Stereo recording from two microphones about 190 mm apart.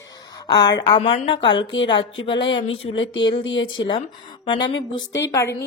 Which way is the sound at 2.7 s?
30° left (ahead or behind).